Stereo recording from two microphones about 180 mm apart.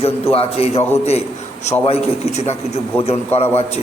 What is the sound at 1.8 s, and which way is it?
Speech, 35° left (ahead or behind).